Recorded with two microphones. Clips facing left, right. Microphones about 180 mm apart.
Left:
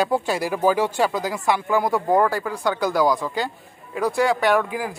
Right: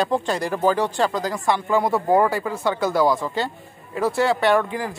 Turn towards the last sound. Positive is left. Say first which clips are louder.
# right 1 dB
turn(degrees=5)  # may be behind; listen again after turning